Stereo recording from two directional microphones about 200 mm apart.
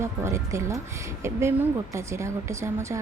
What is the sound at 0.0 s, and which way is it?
A woman's voice, 15° right (ahead or behind).